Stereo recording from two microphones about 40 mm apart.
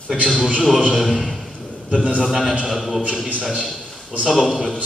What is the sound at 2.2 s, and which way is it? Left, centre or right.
Speech, centre.